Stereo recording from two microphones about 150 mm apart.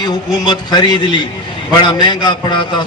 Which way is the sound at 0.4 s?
30° left (ahead or behind).